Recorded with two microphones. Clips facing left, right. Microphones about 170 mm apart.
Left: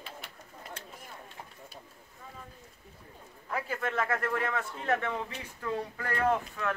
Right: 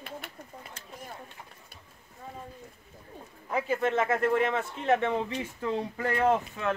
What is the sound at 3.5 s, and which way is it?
A man's voice, 25° right (ahead or behind).